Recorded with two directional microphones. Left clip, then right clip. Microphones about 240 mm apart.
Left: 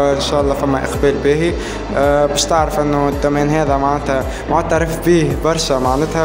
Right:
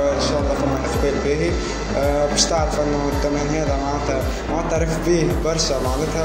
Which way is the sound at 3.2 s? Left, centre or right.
Left.